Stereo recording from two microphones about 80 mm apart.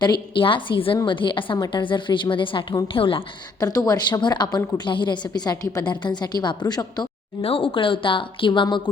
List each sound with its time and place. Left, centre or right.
0.0 s a woman's voice: left
3.6 s a woman's voice: left
7.6 s a woman's voice: left